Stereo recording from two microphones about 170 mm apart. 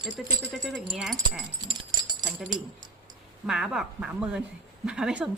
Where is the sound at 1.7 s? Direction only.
25° right (ahead or behind).